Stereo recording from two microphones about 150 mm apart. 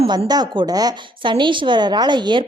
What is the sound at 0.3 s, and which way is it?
Speech, 25° right (ahead or behind).